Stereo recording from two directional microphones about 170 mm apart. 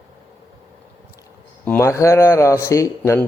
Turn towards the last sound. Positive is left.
turn(degrees=15)  # may be behind; listen again after turning